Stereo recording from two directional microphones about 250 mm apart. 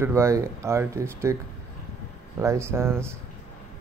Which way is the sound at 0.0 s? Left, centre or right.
Centre.